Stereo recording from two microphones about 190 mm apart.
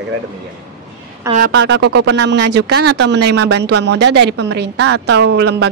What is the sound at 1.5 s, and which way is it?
Speech, 65° right (ahead or behind).